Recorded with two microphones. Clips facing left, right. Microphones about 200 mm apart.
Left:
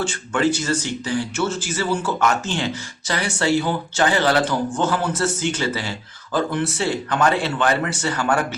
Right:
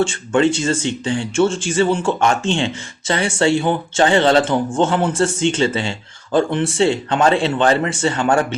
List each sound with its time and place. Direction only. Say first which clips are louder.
0.0 s speech: right 5 dB; 25° right (ahead or behind)